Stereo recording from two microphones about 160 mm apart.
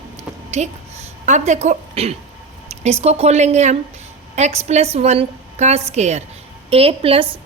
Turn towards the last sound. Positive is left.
turn(degrees=-35)  # may be behind; listen again after turning